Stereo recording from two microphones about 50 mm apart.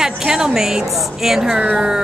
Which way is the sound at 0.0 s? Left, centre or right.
Centre.